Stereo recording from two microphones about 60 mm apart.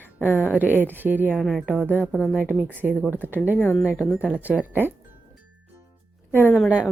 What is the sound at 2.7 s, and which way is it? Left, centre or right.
A woman's voice, right.